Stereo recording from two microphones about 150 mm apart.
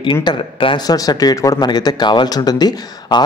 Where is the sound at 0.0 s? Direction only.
30° left (ahead or behind).